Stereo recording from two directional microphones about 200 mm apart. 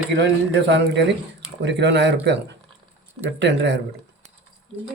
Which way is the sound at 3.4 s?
60° right (ahead or behind).